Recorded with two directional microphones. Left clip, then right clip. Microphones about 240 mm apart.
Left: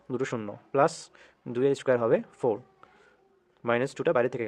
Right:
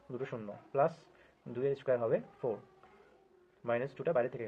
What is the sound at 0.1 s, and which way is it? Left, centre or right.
Speech, left.